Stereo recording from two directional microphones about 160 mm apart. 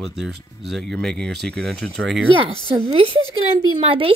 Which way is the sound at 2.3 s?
35° right (ahead or behind).